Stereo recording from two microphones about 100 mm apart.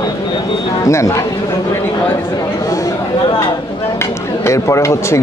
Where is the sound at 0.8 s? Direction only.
30° left (ahead or behind).